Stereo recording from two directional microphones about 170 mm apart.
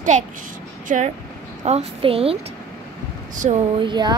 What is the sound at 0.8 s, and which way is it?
A woman's voice, 45° right (ahead or behind).